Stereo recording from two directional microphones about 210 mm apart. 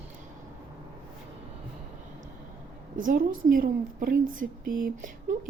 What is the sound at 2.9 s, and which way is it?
A woman's voice, 40° right (ahead or behind).